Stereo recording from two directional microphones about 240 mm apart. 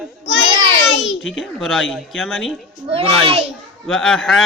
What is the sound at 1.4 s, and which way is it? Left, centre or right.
Mantra, centre.